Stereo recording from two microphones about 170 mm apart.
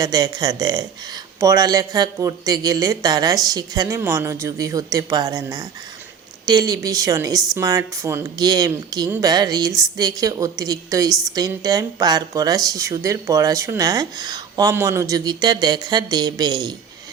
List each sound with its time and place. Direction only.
0.0 s speech: 20° right (ahead or behind)